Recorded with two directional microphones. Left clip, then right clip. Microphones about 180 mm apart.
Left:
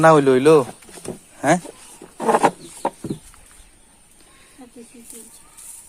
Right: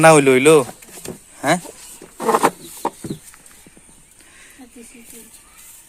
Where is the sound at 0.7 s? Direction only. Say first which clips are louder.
Even; 20° left (ahead or behind).